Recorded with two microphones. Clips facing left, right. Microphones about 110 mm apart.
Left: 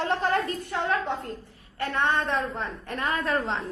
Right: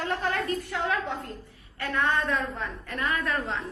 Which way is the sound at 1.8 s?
30° left (ahead or behind).